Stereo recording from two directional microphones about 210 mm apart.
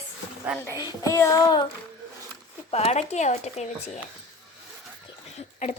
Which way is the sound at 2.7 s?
30° left (ahead or behind).